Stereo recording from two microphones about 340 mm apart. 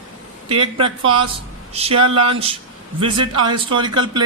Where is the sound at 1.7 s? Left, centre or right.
Centre.